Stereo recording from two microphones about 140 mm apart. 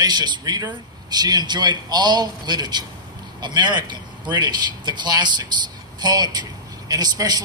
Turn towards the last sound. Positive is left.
turn(degrees=-30)  # may be behind; listen again after turning